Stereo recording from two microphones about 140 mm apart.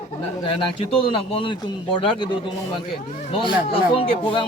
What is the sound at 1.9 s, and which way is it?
Speech, 35° left (ahead or behind).